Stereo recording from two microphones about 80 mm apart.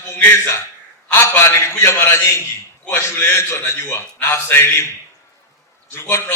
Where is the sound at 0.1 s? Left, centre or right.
Left.